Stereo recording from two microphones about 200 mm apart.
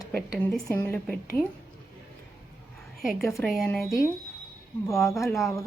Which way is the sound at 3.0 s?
Centre (ahead or behind).